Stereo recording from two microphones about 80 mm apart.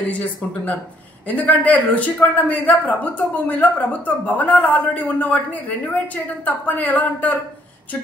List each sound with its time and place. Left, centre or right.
0.1 s a man's voice: centre